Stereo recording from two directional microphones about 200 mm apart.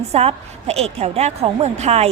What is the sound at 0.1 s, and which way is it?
A woman's voice, 30° right (ahead or behind).